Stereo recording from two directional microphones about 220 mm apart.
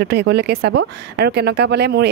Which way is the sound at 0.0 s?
50° right (ahead or behind).